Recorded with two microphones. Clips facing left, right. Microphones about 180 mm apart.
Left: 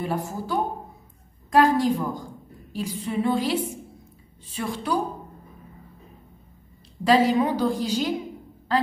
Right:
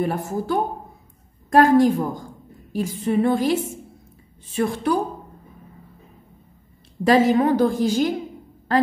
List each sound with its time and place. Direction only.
0.0 s a woman's voice: 50° right (ahead or behind)
4.6 s a woman's voice: 50° right (ahead or behind)
7.1 s a woman's voice: 50° right (ahead or behind)